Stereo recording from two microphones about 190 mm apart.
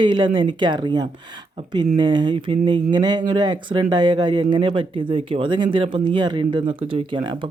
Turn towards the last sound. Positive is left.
turn(degrees=-25)  # may be behind; listen again after turning